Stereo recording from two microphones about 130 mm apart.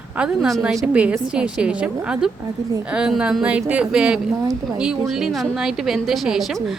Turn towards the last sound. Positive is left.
turn(degrees=0)  # may be behind; listen again after turning